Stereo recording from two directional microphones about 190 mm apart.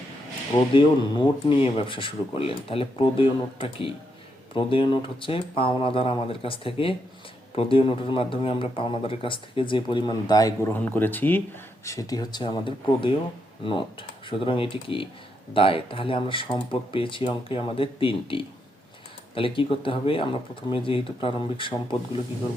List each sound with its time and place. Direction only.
0.7 s speech: 25° left (ahead or behind)
14.3 s speech: 30° left (ahead or behind)